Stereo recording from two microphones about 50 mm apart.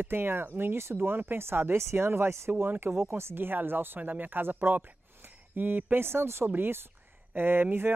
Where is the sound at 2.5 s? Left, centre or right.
Right.